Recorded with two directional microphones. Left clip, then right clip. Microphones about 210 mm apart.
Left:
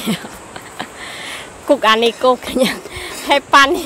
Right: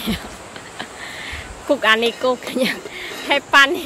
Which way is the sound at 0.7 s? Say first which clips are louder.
Left 3 dB; 25° left (ahead or behind).